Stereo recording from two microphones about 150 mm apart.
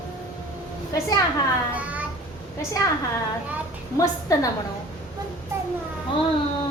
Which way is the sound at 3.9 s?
20° left (ahead or behind).